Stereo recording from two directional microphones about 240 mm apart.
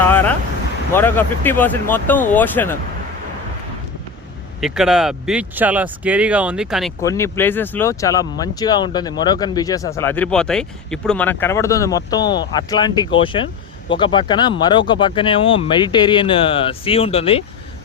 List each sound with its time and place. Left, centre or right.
0.0 s a sound: centre
0.9 s speech: centre
4.6 s speech: centre
7.0 s speech: centre